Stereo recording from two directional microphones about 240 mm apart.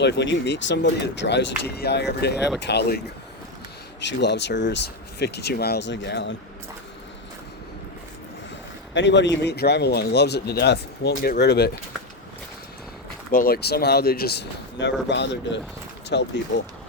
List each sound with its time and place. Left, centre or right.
0.0 s speech: left
4.0 s speech: left
8.9 s speech: left
13.3 s speech: left